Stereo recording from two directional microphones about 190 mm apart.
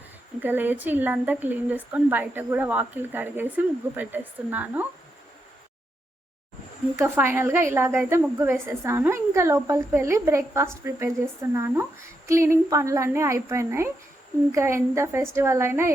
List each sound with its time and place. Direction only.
0.4 s a woman's voice: 10° right (ahead or behind)
7.0 s a woman's voice: 10° right (ahead or behind)